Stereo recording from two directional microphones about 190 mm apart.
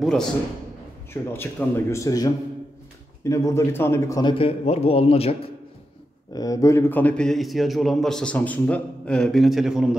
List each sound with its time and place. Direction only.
0.0 s a man's voice: centre (ahead or behind)
1.1 s a man's voice: 10° left (ahead or behind); by 5.5 s 30° left (ahead or behind)
6.3 s a man's voice: 20° left (ahead or behind); by 9.8 s centre (ahead or behind)